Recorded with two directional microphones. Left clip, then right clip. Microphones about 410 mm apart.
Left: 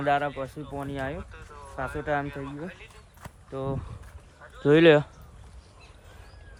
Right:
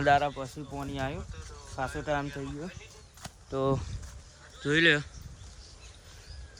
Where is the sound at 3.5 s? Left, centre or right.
Centre.